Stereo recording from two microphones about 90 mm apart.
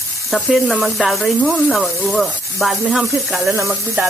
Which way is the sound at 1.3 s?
15° left (ahead or behind).